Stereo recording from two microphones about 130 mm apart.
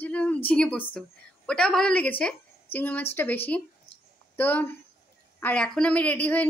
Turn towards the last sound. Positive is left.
turn(degrees=10)  # may be behind; listen again after turning